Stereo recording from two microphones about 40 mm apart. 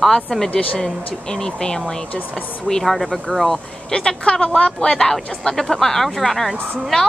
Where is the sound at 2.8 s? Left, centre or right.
Centre.